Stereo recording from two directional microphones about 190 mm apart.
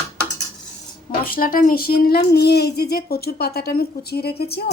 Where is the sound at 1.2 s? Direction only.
50° left (ahead or behind).